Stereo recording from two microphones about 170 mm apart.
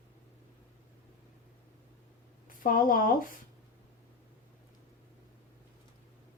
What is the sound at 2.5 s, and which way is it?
Speech, 55° left (ahead or behind).